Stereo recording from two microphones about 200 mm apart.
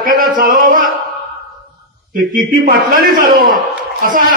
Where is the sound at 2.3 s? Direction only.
40° right (ahead or behind).